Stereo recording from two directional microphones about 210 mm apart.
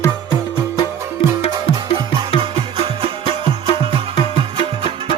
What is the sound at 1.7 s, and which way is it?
Music, 20° right (ahead or behind).